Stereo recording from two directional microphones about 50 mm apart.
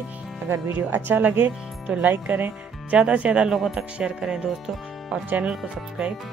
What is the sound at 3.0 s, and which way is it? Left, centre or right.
Speech, right.